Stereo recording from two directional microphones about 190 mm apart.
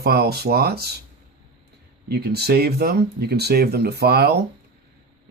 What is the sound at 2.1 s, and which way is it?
Speech, 55° right (ahead or behind).